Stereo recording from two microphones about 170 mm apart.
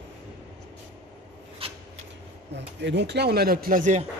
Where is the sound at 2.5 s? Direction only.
90° right; by 4.0 s 45° right (ahead or behind).